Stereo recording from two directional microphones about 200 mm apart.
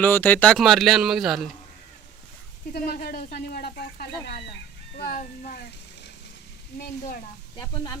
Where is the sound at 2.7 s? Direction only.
50° left (ahead or behind).